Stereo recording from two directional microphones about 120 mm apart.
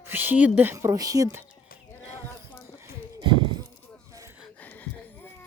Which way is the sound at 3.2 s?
45° right (ahead or behind).